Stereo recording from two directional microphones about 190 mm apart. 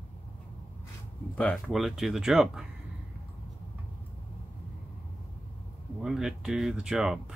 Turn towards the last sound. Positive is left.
turn(degrees=-5)  # may be behind; listen again after turning